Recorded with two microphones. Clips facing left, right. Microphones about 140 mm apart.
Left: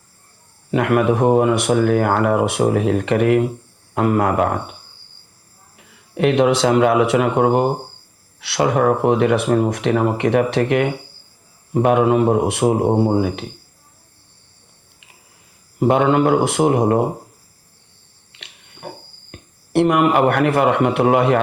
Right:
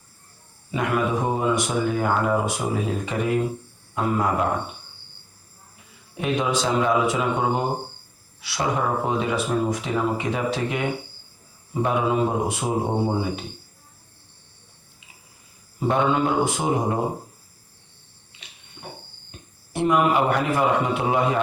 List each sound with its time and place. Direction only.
0.7 s speech: 65° left (ahead or behind)
5.7 s speech: 65° left (ahead or behind)
15.8 s speech: 70° left (ahead or behind)
18.3 s a sound: 70° left (ahead or behind)
19.3 s speech: 70° left (ahead or behind)